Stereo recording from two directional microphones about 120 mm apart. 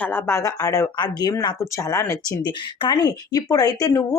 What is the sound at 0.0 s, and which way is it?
Speech, 15° left (ahead or behind).